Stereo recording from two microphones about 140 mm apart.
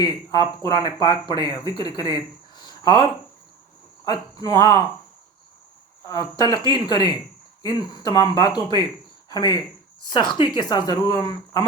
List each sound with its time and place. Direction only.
0.0 s speech: 30° left (ahead or behind)
4.0 s speech: 30° left (ahead or behind)
6.1 s speech: 30° left (ahead or behind)